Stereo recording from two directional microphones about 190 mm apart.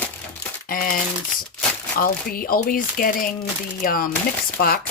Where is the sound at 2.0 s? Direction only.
50° left (ahead or behind).